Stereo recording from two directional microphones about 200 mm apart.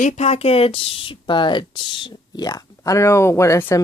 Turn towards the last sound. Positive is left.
turn(degrees=15)  # may be behind; listen again after turning